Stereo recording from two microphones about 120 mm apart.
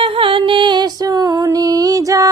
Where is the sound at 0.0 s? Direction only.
45° right (ahead or behind).